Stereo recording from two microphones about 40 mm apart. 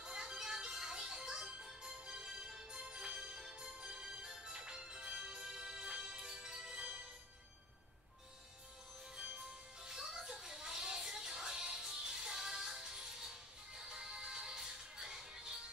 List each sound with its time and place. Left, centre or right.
0.0 s music: centre
9.4 s music: centre